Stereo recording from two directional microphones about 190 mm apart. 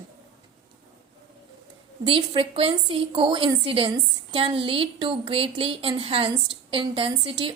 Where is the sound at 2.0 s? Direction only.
30° right (ahead or behind).